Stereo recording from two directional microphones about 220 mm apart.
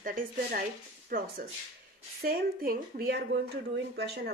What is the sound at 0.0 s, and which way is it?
A woman's voice, 40° right (ahead or behind).